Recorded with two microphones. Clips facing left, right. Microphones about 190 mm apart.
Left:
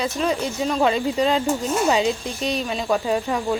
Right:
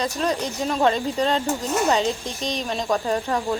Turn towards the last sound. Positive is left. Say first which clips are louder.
# left 1 dB
turn(degrees=10)  # may be behind; listen again after turning